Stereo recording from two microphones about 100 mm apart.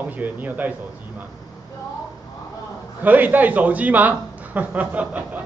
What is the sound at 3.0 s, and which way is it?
A man's voice, 15° right (ahead or behind).